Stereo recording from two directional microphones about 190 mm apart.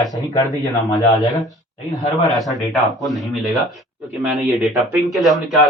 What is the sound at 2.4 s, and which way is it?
A man's voice, centre (ahead or behind).